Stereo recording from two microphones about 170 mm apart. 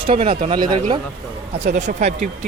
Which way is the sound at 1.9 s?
45° right (ahead or behind).